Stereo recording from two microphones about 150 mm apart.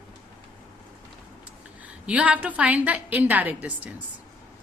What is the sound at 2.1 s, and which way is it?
A woman's voice, 10° right (ahead or behind).